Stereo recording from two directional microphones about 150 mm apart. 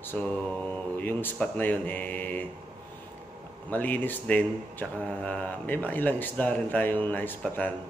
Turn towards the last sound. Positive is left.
turn(degrees=10)  # may be behind; listen again after turning